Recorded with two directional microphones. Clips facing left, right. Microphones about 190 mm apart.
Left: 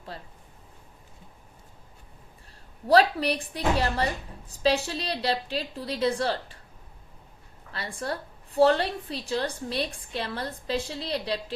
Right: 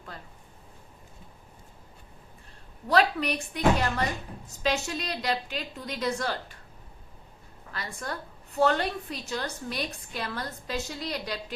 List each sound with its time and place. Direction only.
0.1 s a sound: 30° left (ahead or behind)
2.8 s a woman's voice: 35° left (ahead or behind)
7.7 s a woman's voice: 30° left (ahead or behind)